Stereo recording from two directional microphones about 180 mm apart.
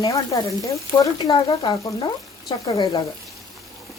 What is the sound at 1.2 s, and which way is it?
Speech, 25° left (ahead or behind).